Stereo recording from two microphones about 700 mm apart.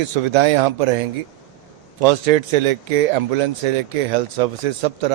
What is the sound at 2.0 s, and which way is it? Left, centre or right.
Speech, right.